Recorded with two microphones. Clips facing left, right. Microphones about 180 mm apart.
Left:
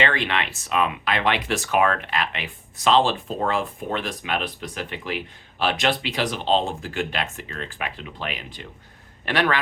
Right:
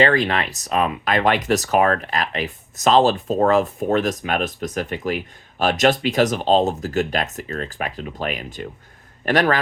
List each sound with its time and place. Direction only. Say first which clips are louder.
0.0 s a man's voice: right 6 dB; 40° right (ahead or behind)